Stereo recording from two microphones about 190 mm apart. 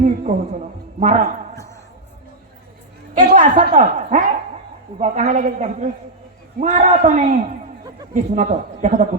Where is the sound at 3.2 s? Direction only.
40° right (ahead or behind).